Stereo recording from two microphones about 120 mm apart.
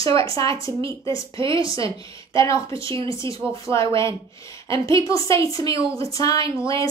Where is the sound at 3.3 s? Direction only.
45° right (ahead or behind).